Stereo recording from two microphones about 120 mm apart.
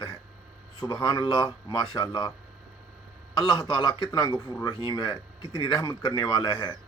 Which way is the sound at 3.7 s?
35° left (ahead or behind).